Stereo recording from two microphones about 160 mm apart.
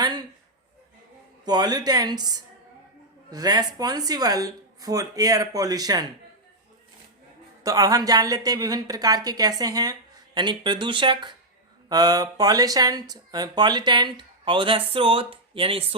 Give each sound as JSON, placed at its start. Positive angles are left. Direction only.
{"t": 0.0, "sound": "a sound", "side_deg": -25}
{"t": 1.5, "sound": "speech", "side_deg": -25}
{"t": 7.6, "sound": "speech", "side_deg": -20}